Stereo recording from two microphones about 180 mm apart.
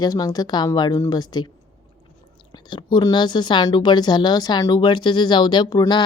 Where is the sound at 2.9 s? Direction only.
25° left (ahead or behind).